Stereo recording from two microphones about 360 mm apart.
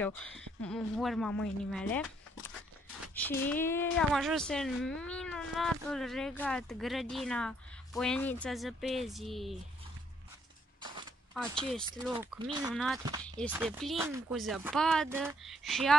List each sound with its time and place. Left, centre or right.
0.0 s speech: centre
3.2 s speech: centre
11.3 s speech: centre
12.1 s speech: centre
12.7 s speech: centre